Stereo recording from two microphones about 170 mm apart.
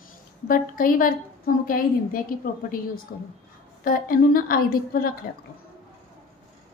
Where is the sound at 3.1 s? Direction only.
70° left (ahead or behind).